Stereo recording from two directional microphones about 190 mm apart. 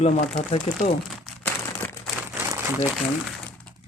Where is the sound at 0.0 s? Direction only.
30° left (ahead or behind).